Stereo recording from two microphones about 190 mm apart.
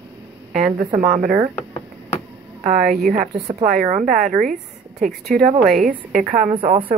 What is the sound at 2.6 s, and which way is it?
A woman's voice, 45° right (ahead or behind).